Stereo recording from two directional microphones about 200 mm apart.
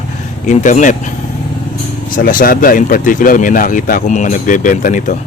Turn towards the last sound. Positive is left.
turn(degrees=40)  # may be behind; listen again after turning